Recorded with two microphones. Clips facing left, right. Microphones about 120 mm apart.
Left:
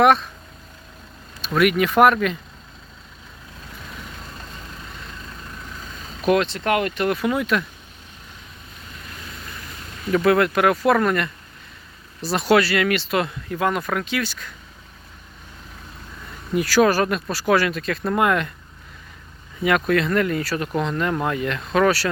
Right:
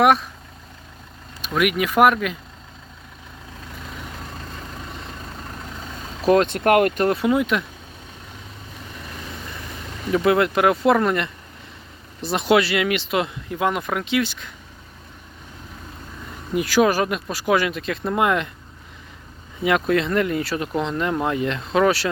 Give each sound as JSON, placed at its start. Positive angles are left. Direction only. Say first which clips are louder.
{"t": 0.0, "sound": "speech", "louder": "left 1 dB", "side_deg": -10}
{"t": 1.4, "sound": "speech", "louder": "left 3 dB", "side_deg": -10}
{"t": 6.4, "sound": "speech", "louder": "right 5 dB", "side_deg": -55}
{"t": 7.1, "sound": "speech", "louder": "right 2 dB", "side_deg": -25}
{"t": 10.1, "sound": "speech", "louder": "left 1 dB", "side_deg": -20}
{"t": 16.6, "sound": "speech", "louder": "left 1 dB", "side_deg": -15}
{"t": 19.6, "sound": "speech", "louder": "even", "side_deg": -20}